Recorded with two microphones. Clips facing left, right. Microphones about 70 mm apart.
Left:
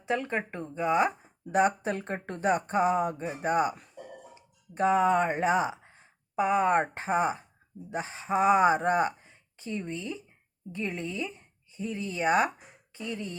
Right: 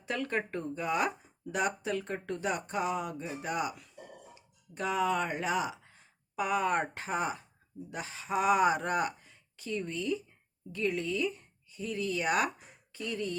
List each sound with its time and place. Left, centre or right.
0.0 s speech: left